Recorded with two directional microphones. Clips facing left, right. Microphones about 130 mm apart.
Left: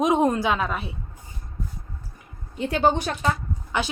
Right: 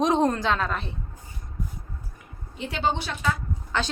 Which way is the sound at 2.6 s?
45° left (ahead or behind).